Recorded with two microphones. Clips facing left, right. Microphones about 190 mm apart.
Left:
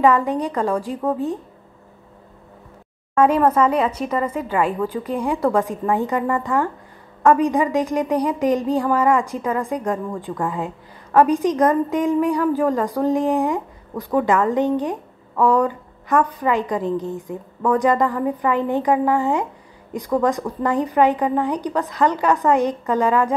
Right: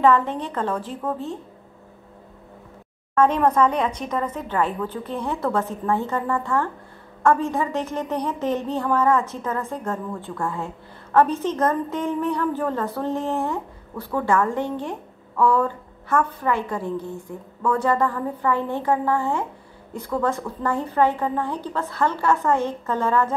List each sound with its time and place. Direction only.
0.0 s a woman's voice: 15° left (ahead or behind)
3.2 s a woman's voice: 10° left (ahead or behind)